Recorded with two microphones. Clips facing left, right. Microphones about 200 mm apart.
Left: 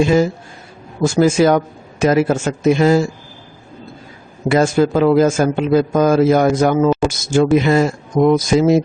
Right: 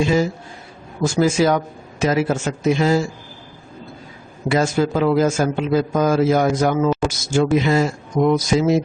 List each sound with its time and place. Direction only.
1.0 s a man's voice: 55° left (ahead or behind)
4.4 s a man's voice: 50° left (ahead or behind)